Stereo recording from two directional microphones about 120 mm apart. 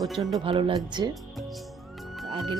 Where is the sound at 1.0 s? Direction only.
40° right (ahead or behind).